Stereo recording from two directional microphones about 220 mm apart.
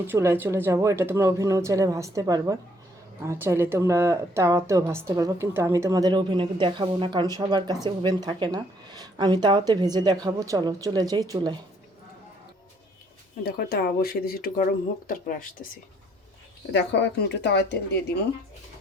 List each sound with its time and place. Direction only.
0.1 s a woman's voice: 10° right (ahead or behind)
13.4 s speech: 45° left (ahead or behind)
16.7 s speech: 55° left (ahead or behind)